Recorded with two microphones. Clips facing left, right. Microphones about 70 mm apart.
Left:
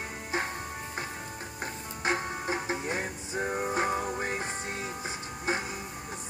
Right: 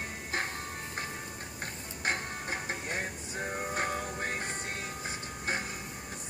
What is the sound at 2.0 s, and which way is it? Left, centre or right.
Music, centre.